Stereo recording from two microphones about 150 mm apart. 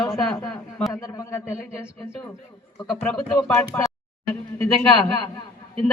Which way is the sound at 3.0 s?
5° left (ahead or behind).